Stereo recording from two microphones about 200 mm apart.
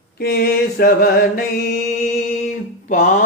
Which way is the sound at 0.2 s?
50° left (ahead or behind).